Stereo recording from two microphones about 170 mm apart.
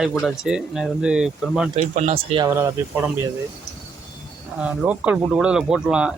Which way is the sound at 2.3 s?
20° right (ahead or behind).